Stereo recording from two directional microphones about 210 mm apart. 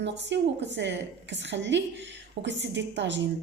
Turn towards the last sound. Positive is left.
turn(degrees=-60)  # may be behind; listen again after turning